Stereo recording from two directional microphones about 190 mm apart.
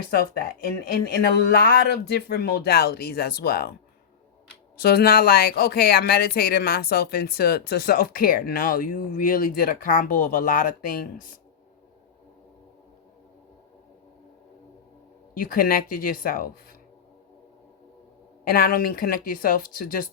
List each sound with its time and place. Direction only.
0.0 s speech: 50° left (ahead or behind)
4.8 s speech: 55° left (ahead or behind)
15.4 s speech: 50° left (ahead or behind)
18.4 s speech: 50° left (ahead or behind)